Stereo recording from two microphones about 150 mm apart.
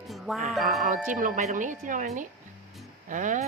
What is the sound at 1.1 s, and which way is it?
Speech, 60° right (ahead or behind).